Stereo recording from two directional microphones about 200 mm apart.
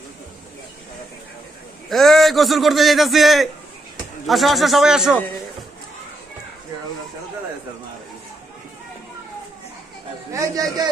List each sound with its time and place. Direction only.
1.9 s a man's voice: centre (ahead or behind)
10.3 s a man's voice: 15° right (ahead or behind)